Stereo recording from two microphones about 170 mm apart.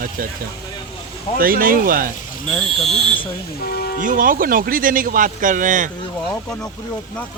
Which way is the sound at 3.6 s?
65° left (ahead or behind).